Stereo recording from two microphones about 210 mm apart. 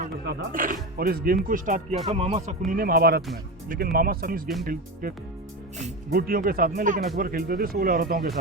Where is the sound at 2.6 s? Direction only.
45° right (ahead or behind).